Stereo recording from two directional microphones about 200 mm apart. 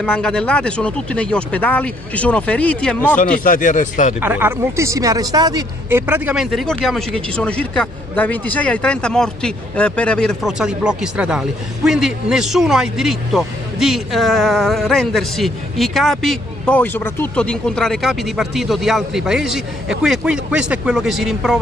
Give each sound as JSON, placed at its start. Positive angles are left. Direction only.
{"t": 0.0, "sound": "speech", "side_deg": 5}
{"t": 3.2, "sound": "speech", "side_deg": 40}
{"t": 4.2, "sound": "speech", "side_deg": -10}